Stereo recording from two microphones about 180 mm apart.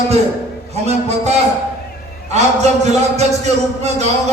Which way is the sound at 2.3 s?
40° right (ahead or behind).